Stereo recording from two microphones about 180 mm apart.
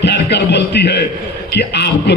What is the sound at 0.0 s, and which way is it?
A man's voice, 70° left (ahead or behind).